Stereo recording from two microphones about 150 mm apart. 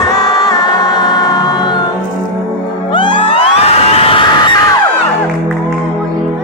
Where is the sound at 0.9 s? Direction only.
25° left (ahead or behind).